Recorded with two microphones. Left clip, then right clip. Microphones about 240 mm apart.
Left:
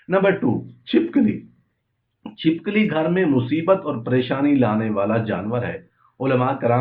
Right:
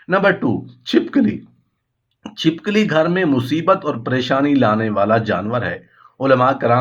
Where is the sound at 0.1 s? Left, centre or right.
Right.